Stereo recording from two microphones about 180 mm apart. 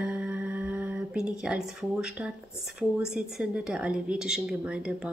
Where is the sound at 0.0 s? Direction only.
5° right (ahead or behind).